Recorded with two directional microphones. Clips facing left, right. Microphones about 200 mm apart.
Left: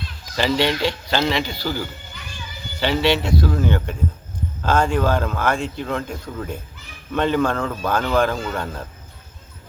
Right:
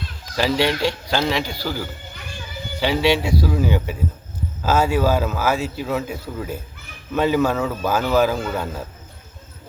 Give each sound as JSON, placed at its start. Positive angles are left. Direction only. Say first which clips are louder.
{"t": 0.3, "sound": "a man's voice", "louder": "even", "side_deg": -5}